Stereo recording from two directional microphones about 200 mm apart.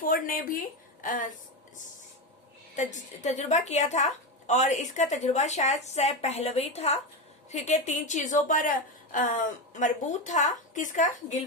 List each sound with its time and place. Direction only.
0.0 s a woman's voice: 45° left (ahead or behind)
2.7 s a woman's voice: 35° left (ahead or behind)